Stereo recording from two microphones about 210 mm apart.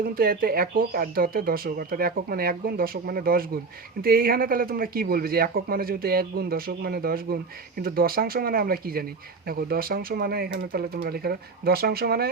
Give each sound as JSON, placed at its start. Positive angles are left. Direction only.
{"t": 0.0, "sound": "speech", "side_deg": -45}